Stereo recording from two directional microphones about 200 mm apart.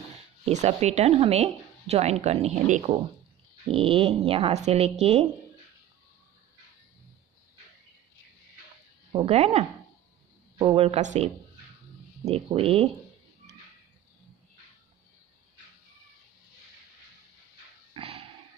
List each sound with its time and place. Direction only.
0.5 s speech: 35° right (ahead or behind)
9.1 s speech: 30° right (ahead or behind)
12.3 s speech: 30° right (ahead or behind)
17.9 s a sound: 30° right (ahead or behind)